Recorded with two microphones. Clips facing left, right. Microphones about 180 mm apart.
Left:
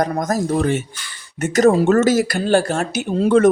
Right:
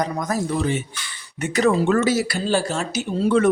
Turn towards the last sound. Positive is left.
turn(degrees=50)  # may be behind; listen again after turning